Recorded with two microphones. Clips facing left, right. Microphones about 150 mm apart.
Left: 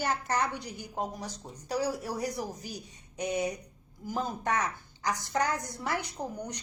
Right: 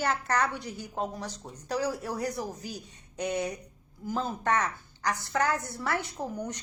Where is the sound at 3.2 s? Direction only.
10° left (ahead or behind).